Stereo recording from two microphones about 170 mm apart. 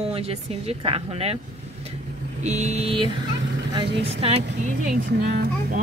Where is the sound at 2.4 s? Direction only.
40° right (ahead or behind).